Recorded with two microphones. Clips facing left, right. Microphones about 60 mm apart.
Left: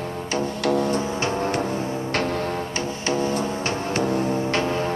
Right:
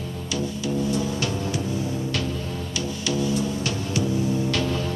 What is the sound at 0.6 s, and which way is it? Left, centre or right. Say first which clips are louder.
Music: left 6 dB; left.